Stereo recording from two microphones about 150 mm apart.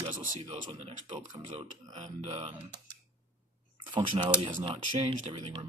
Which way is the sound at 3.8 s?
30° right (ahead or behind).